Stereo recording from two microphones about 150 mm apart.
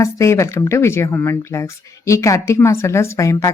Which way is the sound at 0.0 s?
20° left (ahead or behind).